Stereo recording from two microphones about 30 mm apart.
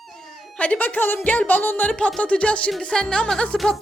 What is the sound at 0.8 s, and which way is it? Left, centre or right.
Speech, left.